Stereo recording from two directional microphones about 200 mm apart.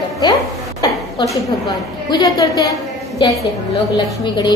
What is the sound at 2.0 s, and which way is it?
Speech, 20° left (ahead or behind).